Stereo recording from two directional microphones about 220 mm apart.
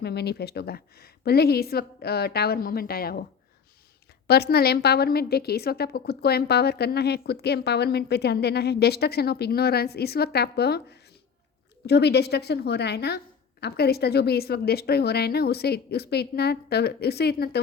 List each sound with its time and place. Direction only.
0.0 s a woman's voice: 50° left (ahead or behind)
4.3 s a woman's voice: 45° left (ahead or behind)